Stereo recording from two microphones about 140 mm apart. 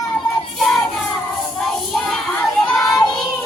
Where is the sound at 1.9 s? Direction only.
Centre (ahead or behind).